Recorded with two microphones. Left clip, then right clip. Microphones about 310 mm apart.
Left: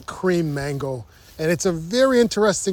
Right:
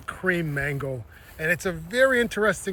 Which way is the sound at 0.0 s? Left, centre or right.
Centre.